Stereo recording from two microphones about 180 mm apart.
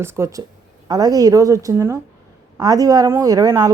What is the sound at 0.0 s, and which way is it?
A woman's voice, 15° right (ahead or behind).